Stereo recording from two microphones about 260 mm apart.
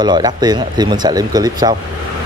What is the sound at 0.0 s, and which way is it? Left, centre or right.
Speech, centre.